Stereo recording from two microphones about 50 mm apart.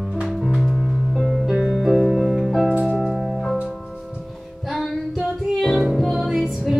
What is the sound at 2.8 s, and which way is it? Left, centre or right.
Keyboard, centre.